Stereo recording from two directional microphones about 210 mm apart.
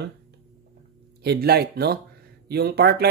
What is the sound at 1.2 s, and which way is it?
Speech, 50° right (ahead or behind).